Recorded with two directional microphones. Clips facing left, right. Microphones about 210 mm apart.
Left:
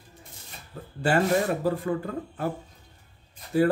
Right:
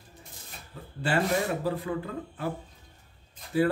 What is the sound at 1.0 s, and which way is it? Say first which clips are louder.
Speech: left 4 dB; 45° left (ahead or behind).